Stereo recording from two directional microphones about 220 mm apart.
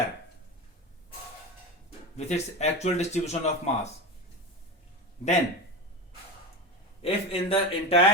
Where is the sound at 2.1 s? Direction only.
30° left (ahead or behind).